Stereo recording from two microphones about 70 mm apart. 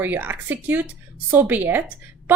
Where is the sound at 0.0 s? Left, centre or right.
Right.